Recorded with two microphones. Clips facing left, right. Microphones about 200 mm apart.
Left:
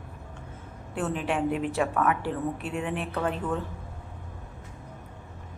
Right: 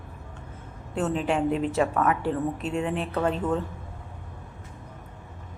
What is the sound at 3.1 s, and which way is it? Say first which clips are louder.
Speech: right 4 dB; 25° right (ahead or behind).